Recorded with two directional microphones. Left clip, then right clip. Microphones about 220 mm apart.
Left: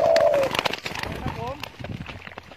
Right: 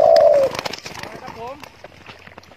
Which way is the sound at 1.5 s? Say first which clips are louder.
Left 3 dB; 45° left (ahead or behind).